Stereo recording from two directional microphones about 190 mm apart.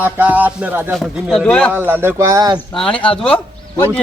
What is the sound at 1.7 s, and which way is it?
Speech, 10° right (ahead or behind).